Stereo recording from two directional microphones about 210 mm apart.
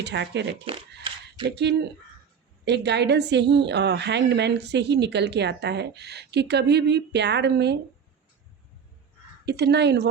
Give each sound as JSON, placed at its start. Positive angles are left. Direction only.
{"t": 0.0, "sound": "speech", "side_deg": -55}
{"t": 0.5, "sound": "speech", "side_deg": -25}
{"t": 1.5, "sound": "a woman's voice", "side_deg": -55}
{"t": 9.5, "sound": "a woman's voice", "side_deg": -50}